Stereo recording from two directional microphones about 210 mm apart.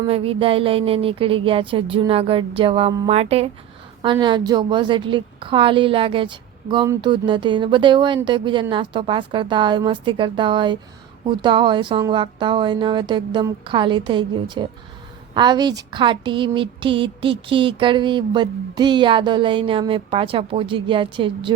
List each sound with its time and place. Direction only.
0.1 s speech: 25° right (ahead or behind)